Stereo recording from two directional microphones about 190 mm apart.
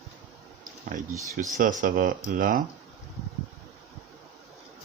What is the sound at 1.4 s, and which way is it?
Speech, 45° right (ahead or behind).